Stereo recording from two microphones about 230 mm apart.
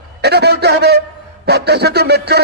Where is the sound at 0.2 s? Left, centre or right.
Right.